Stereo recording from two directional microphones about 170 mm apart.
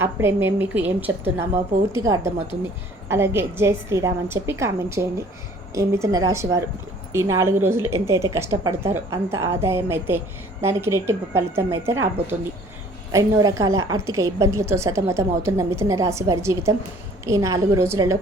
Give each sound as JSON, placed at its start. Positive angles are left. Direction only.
{"t": 0.0, "sound": "a woman's voice", "side_deg": -15}